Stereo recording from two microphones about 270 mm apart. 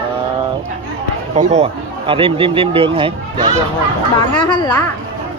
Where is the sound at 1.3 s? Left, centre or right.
Right.